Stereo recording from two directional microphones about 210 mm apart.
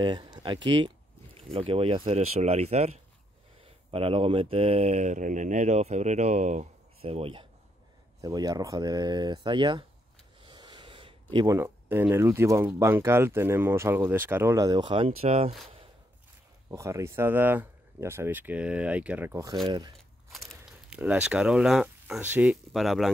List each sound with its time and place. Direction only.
0.0 s speech: 20° right (ahead or behind)
10.4 s a sound: 20° right (ahead or behind)
11.3 s speech: 15° right (ahead or behind)
16.7 s speech: 15° right (ahead or behind)
20.3 s speech: 5° right (ahead or behind)